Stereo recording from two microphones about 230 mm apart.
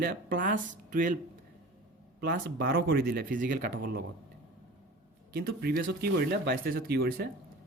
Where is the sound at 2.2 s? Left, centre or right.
Right.